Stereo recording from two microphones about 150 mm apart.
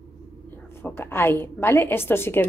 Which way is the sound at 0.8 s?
15° left (ahead or behind).